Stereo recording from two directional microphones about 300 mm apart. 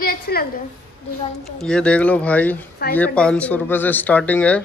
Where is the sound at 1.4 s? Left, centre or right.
Centre.